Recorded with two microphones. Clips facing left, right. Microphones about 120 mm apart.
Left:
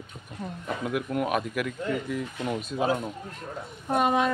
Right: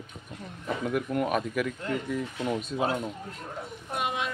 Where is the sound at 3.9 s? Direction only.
45° left (ahead or behind).